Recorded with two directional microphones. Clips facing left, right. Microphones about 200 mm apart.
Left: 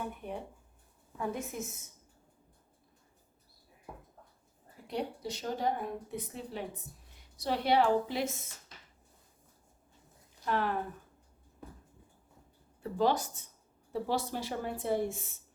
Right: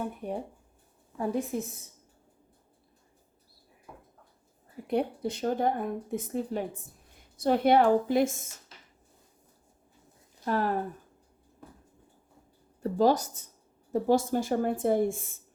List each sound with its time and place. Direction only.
0.0 s speech: 40° right (ahead or behind)
4.9 s speech: 55° right (ahead or behind)
10.4 s speech: 40° right (ahead or behind)
12.8 s speech: 40° right (ahead or behind)